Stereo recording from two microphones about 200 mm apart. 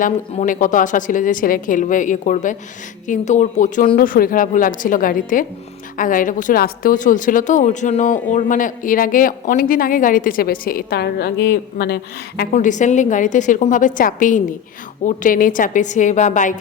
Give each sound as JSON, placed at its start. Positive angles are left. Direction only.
{"t": 0.0, "sound": "a woman's voice", "side_deg": 40}
{"t": 12.5, "sound": "a woman's voice", "side_deg": 40}